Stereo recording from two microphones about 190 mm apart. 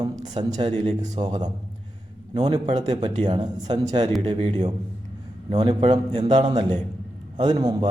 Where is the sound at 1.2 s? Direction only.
20° right (ahead or behind).